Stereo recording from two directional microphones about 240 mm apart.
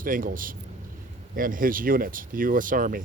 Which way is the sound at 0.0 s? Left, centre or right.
Right.